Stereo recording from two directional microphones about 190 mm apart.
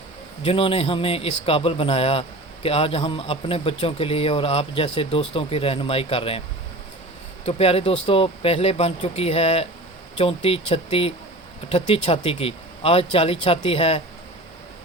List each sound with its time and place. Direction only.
0.4 s a man's voice: 30° left (ahead or behind)
7.4 s speech: 30° left (ahead or behind)